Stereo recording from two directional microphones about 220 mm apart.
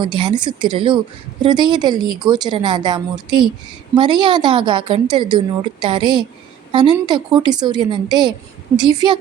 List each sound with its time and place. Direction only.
0.0 s a woman's voice: 20° right (ahead or behind)